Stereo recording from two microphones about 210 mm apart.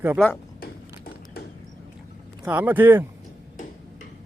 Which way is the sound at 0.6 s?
45° left (ahead or behind).